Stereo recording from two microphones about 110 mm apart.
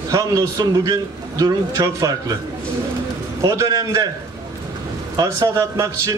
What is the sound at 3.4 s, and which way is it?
Speech, 30° right (ahead or behind).